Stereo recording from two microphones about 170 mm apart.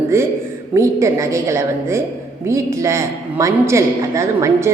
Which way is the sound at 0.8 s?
15° right (ahead or behind).